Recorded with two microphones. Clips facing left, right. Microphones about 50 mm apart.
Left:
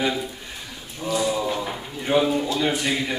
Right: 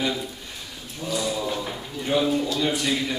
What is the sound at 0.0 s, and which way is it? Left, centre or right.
Speech, centre.